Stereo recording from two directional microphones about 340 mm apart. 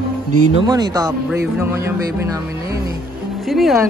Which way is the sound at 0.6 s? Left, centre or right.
Centre.